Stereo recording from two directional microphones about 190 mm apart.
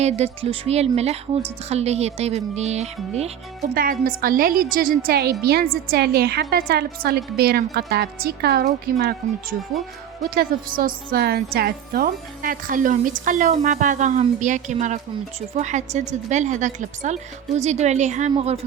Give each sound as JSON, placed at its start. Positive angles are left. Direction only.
{"t": 0.0, "sound": "a woman's voice", "side_deg": -35}
{"t": 4.0, "sound": "a woman's voice", "side_deg": -50}